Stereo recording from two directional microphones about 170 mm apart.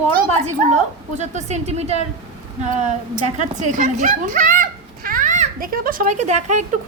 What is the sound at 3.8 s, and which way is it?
A child's voice, 45° right (ahead or behind).